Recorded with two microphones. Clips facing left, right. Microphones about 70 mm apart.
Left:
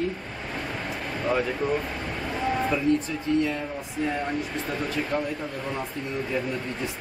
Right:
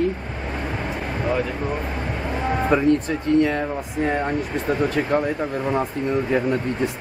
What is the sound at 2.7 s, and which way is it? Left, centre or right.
Speech, right.